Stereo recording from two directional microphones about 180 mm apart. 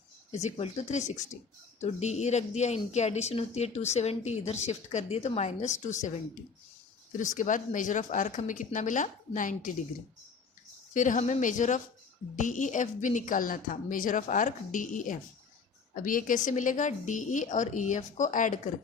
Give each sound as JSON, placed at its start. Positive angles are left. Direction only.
{"t": 0.4, "sound": "speech", "side_deg": 35}
{"t": 7.2, "sound": "a woman's voice", "side_deg": 45}
{"t": 10.9, "sound": "a woman's voice", "side_deg": 45}